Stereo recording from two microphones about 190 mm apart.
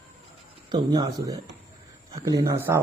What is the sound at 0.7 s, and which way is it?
Speech, 25° right (ahead or behind).